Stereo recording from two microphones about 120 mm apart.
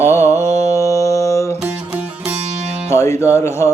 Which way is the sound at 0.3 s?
65° right (ahead or behind).